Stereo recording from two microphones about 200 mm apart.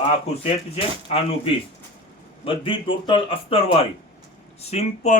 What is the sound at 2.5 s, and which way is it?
Speech, 25° left (ahead or behind).